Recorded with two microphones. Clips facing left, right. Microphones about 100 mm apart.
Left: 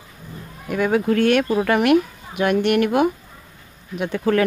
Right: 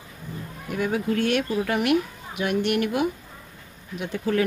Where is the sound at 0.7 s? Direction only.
75° left (ahead or behind).